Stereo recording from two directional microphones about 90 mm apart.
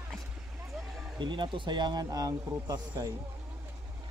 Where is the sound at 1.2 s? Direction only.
65° right (ahead or behind); by 3.0 s 40° right (ahead or behind).